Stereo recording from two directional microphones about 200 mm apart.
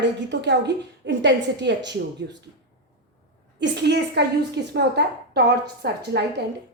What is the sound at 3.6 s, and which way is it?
A woman's voice, 60° right (ahead or behind).